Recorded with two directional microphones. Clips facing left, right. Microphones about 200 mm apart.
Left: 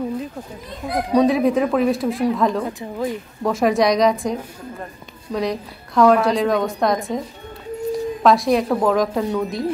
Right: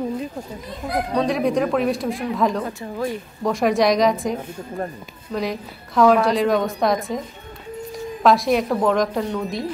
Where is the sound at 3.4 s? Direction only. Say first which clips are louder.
Left 1 dB; centre (ahead or behind).